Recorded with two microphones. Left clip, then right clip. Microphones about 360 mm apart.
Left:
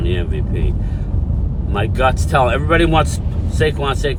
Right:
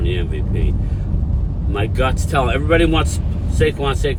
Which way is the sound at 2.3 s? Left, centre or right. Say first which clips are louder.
Even; centre.